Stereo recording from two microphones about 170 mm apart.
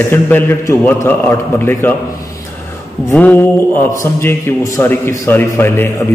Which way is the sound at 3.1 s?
10° left (ahead or behind).